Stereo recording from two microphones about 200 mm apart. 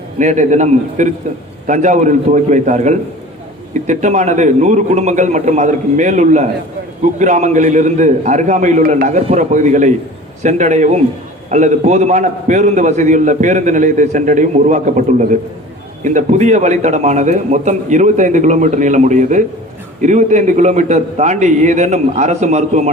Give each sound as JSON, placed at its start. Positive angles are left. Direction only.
{"t": 0.2, "sound": "a man's voice", "side_deg": -35}